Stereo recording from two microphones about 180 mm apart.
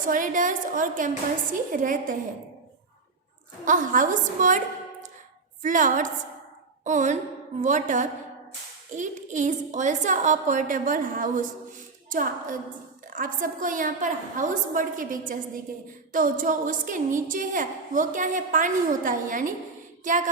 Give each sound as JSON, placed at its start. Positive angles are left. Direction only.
{"t": 0.0, "sound": "a woman's voice", "side_deg": -45}
{"t": 3.7, "sound": "a woman's voice", "side_deg": -45}
{"t": 5.6, "sound": "a woman's voice", "side_deg": -45}